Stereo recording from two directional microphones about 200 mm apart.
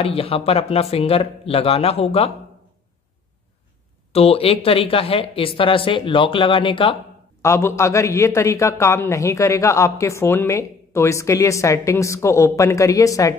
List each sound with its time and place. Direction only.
0.0 s speech: 30° left (ahead or behind)
4.1 s speech: 30° left (ahead or behind)
7.4 s a man's voice: 15° left (ahead or behind)